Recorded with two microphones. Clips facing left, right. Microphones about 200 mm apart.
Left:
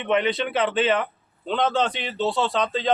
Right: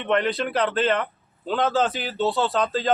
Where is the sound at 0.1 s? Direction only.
Centre (ahead or behind).